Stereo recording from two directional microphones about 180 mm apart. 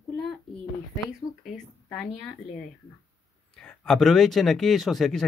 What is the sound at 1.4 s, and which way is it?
Speech, 5° left (ahead or behind).